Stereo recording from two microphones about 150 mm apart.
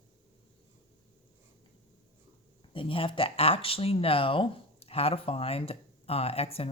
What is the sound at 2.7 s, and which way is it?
Speech, 35° left (ahead or behind).